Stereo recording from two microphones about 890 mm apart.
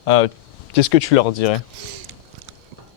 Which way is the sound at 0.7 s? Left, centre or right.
Left.